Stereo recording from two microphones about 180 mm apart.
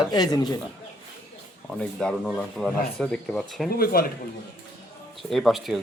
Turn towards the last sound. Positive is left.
turn(degrees=0)  # may be behind; listen again after turning